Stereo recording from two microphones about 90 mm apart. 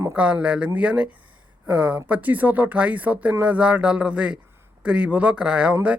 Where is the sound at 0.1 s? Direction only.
15° right (ahead or behind).